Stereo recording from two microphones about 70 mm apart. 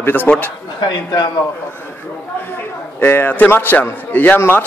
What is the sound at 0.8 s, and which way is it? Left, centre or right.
Speech, left.